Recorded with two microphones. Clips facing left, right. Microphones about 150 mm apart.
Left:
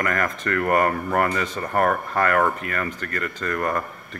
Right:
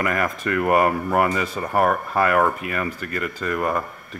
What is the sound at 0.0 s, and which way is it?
Speech, 10° right (ahead or behind).